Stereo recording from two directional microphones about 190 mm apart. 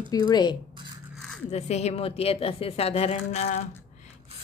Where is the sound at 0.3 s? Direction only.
20° left (ahead or behind).